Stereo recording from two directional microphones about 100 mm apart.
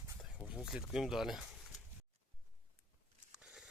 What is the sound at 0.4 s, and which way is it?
Speech, 5° right (ahead or behind).